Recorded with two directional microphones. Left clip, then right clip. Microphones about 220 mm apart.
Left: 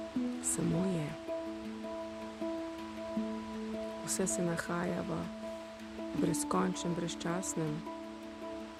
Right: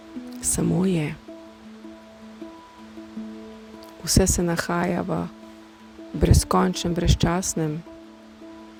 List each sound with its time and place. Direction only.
0.4 s speech: 40° right (ahead or behind)
4.0 s speech: 35° right (ahead or behind)
6.2 s speech: 35° right (ahead or behind)